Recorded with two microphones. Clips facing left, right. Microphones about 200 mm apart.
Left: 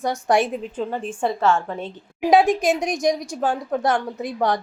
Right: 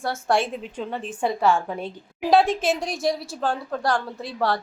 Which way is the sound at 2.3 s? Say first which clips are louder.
Left 3 dB; 15° left (ahead or behind).